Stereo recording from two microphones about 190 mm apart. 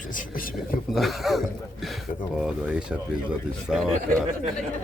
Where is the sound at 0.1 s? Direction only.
45° left (ahead or behind).